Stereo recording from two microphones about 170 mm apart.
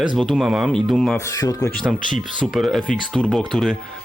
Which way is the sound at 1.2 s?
20° left (ahead or behind).